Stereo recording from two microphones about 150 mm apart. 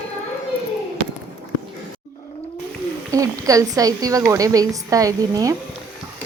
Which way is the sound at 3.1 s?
20° right (ahead or behind).